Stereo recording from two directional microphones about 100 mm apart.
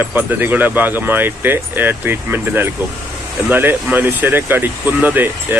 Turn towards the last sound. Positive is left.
turn(degrees=-20)  # may be behind; listen again after turning